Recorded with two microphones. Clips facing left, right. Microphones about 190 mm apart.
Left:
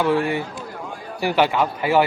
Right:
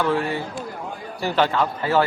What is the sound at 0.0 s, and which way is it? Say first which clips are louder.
A man's voice: left 2 dB; 15° left (ahead or behind).